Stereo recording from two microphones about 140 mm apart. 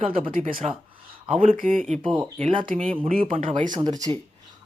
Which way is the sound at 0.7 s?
40° right (ahead or behind).